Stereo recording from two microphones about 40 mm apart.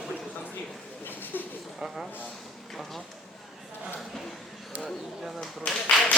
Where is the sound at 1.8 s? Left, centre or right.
Centre.